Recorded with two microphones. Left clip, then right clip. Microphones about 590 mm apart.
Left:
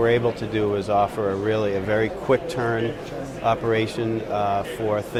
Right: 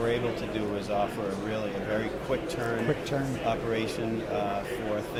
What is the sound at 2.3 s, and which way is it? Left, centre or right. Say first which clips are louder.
Speech: left 8 dB; left.